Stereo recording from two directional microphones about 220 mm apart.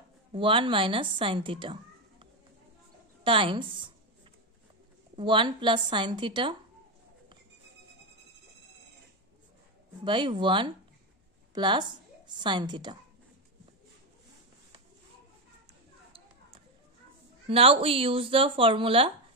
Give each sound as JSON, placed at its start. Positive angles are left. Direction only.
{"t": 0.3, "sound": "speech", "side_deg": -25}
{"t": 3.3, "sound": "speech", "side_deg": -25}
{"t": 5.1, "sound": "speech", "side_deg": -20}
{"t": 10.0, "sound": "a woman's voice", "side_deg": -20}
{"t": 17.5, "sound": "speech", "side_deg": -25}